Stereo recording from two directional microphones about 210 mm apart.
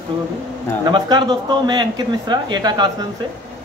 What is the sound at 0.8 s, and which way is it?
A man's voice, 20° right (ahead or behind).